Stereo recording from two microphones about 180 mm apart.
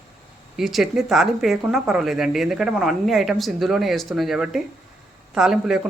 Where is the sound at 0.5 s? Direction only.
Centre (ahead or behind).